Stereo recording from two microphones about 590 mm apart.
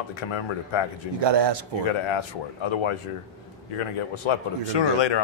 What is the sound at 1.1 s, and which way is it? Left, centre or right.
Speech, right.